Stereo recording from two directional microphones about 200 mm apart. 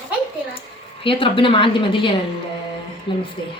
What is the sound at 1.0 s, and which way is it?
A woman's voice, 25° left (ahead or behind).